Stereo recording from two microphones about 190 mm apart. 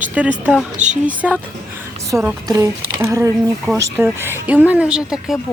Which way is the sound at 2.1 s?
15° right (ahead or behind).